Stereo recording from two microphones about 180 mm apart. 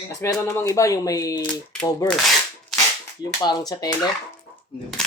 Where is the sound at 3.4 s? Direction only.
25° left (ahead or behind).